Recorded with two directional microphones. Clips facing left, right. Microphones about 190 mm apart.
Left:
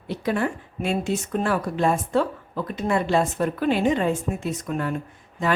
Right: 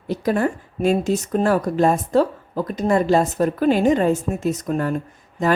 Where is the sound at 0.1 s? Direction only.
40° right (ahead or behind).